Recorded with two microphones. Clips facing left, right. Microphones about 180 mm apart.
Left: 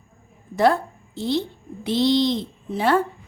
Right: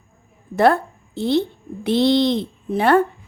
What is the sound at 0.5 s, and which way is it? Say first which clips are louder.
A woman's voice: right 3 dB; 60° right (ahead or behind).